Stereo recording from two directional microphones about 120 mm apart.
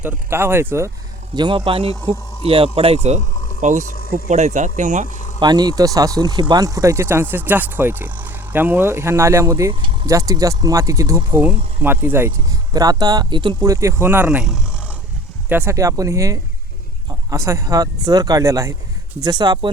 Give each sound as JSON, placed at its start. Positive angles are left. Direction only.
{"t": 0.0, "sound": "speech", "side_deg": -15}
{"t": 1.4, "sound": "speech", "side_deg": -40}
{"t": 3.6, "sound": "speech", "side_deg": -90}
{"t": 4.3, "sound": "speech", "side_deg": -75}
{"t": 5.1, "sound": "a sound", "side_deg": 90}
{"t": 5.4, "sound": "speech", "side_deg": -35}
{"t": 9.7, "sound": "a sound", "side_deg": -45}
{"t": 10.1, "sound": "speech", "side_deg": -30}
{"t": 11.8, "sound": "speech", "side_deg": -15}
{"t": 12.5, "sound": "speech", "side_deg": -30}
{"t": 14.3, "sound": "speech", "side_deg": -5}
{"t": 15.4, "sound": "speech", "side_deg": -15}
{"t": 15.7, "sound": "speech", "side_deg": -25}